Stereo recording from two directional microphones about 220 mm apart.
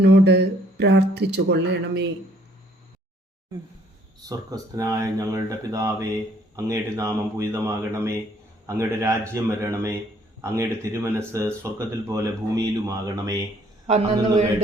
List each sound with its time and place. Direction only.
0.0 s speech: 50° right (ahead or behind)
4.2 s speech: 15° right (ahead or behind)
13.8 s a man's voice: 30° right (ahead or behind)